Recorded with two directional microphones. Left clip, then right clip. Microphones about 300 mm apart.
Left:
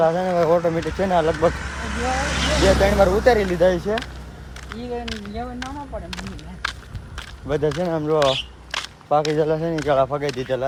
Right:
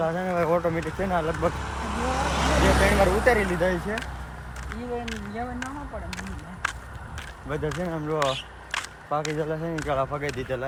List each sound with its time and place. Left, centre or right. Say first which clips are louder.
0.0 s speech: left 7 dB; centre
1.2 s speech: left 7 dB; centre; by 2.9 s right
3.0 s speech: left 5 dB; centre
7.2 s a sound: left 8 dB; centre
7.9 s speech: left 8 dB; centre
8.7 s walk: left 3 dB; centre
9.4 s speech: left 8 dB; centre